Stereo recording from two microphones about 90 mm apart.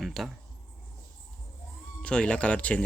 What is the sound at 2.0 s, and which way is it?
Speech, 10° left (ahead or behind).